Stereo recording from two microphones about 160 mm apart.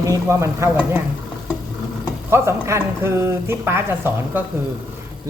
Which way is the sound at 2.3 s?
15° right (ahead or behind).